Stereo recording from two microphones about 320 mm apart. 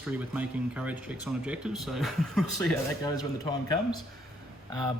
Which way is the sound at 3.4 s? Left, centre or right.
Centre.